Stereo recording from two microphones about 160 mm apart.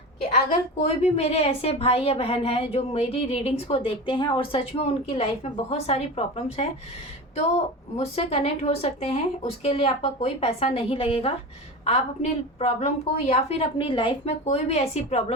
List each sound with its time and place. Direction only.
0.2 s a woman's voice: 40° left (ahead or behind)
7.9 s a woman's voice: 40° left (ahead or behind)